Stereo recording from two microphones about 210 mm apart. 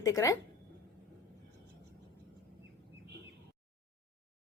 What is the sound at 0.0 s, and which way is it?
Speech, 15° left (ahead or behind).